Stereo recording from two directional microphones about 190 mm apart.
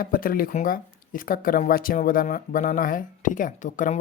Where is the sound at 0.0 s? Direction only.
50° left (ahead or behind).